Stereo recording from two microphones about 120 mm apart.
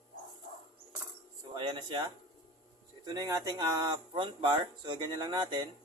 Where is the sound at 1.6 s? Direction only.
40° right (ahead or behind).